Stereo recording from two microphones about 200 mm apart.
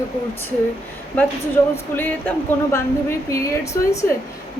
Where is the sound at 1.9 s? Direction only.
10° left (ahead or behind).